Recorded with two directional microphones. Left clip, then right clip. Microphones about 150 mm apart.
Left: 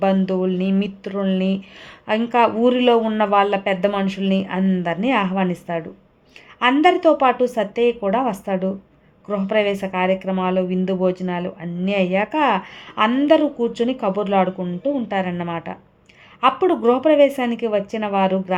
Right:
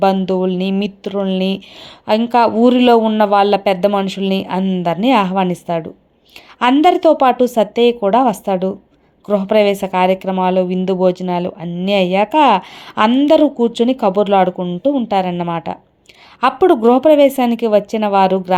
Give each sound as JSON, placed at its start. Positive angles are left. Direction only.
{"t": 0.0, "sound": "speech", "side_deg": -25}